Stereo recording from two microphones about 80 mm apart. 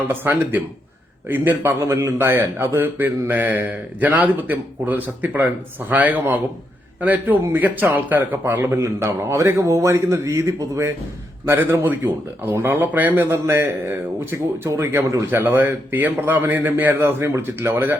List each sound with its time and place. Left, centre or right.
0.1 s speech: right
8.7 s a man's voice: right